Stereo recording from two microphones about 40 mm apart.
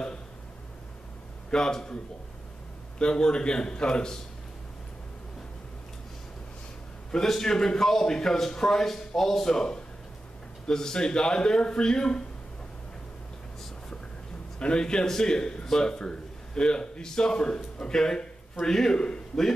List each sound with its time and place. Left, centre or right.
1.5 s a man's voice: centre
3.0 s speech: centre
7.2 s a man's voice: centre
14.6 s speech: left